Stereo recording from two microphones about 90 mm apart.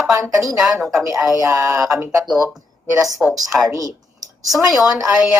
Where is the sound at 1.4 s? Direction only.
35° right (ahead or behind).